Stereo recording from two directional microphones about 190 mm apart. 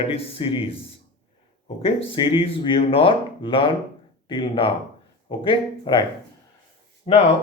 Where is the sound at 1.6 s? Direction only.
30° left (ahead or behind).